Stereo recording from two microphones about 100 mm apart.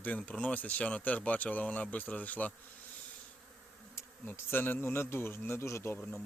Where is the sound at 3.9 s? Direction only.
20° left (ahead or behind).